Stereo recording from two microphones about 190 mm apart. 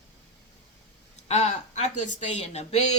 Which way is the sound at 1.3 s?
35° left (ahead or behind).